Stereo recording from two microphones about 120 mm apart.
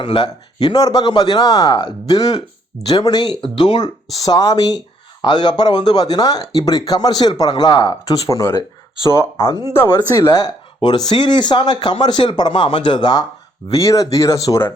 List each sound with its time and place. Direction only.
0.0 s speech: 40° left (ahead or behind); by 10.0 s 20° left (ahead or behind)
10.2 s speech: 30° left (ahead or behind)